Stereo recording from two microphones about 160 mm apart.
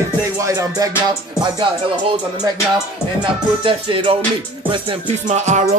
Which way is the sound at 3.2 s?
30° right (ahead or behind).